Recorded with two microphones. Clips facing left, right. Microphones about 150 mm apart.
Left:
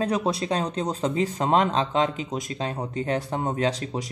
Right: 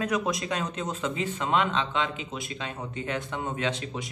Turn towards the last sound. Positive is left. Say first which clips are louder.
# left 5 dB
turn(degrees=35)  # may be behind; listen again after turning